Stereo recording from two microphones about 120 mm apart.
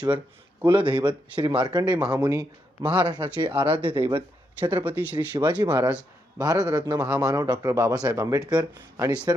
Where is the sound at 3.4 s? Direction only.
45° right (ahead or behind).